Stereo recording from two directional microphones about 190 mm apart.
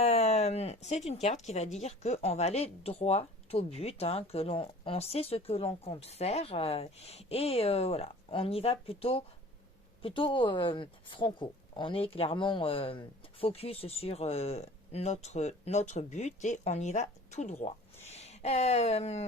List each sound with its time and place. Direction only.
0.0 s speech: 35° left (ahead or behind)